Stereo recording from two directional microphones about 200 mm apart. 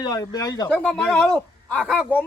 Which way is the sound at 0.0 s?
15° left (ahead or behind).